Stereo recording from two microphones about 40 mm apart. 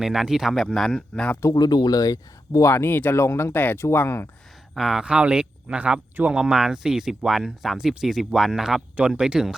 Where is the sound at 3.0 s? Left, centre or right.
Left.